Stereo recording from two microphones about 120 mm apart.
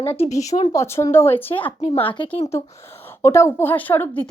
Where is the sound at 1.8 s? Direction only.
60° left (ahead or behind).